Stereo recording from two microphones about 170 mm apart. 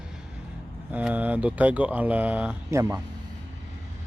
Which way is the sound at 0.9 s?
10° right (ahead or behind).